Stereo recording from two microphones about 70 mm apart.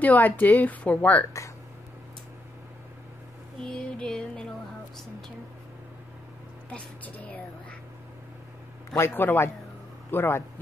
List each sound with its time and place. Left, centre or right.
0.0 s speech: left
3.7 s music: centre
8.9 s a man's voice: left